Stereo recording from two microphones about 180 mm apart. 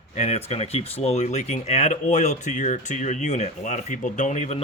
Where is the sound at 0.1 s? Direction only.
40° left (ahead or behind).